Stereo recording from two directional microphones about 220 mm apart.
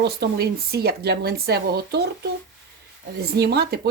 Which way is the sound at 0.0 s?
45° right (ahead or behind).